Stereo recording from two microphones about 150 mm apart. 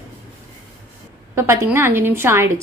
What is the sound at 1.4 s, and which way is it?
A woman's voice, 20° right (ahead or behind).